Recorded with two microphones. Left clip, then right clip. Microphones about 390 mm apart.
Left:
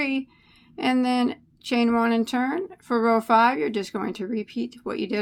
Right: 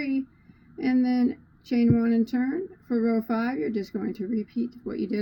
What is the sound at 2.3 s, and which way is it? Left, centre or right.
A woman's voice, left.